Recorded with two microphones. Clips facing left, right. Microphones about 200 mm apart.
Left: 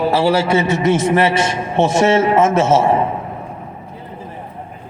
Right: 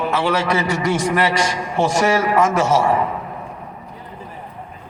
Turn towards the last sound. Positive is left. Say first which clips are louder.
# left 3 dB
turn(degrees=25)  # may be behind; listen again after turning